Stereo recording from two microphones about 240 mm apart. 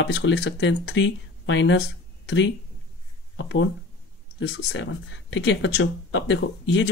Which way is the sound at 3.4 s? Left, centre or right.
Left.